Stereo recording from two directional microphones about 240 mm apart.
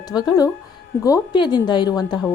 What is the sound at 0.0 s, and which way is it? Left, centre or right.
A woman's voice, centre.